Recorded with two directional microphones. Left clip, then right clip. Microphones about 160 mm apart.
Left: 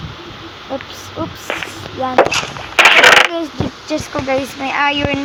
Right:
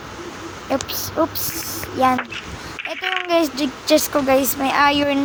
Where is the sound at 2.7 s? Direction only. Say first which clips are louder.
Left 18 dB; 70° left (ahead or behind).